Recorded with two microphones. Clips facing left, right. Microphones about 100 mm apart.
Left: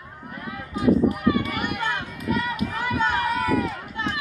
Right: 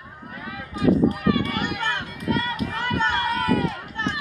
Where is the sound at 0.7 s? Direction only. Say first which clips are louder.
Even; centre (ahead or behind).